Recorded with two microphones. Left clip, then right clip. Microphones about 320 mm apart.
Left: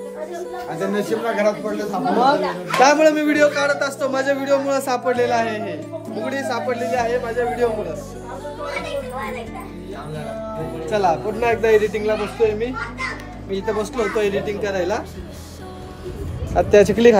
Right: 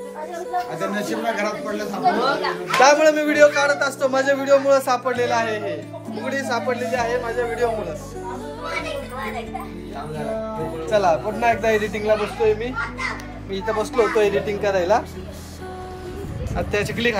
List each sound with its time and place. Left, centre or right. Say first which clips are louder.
0.9 s speech: left 4 dB; left
2.8 s a man's voice: left 1 dB; centre
10.9 s a man's voice: even; centre
16.5 s speech: left 10 dB; left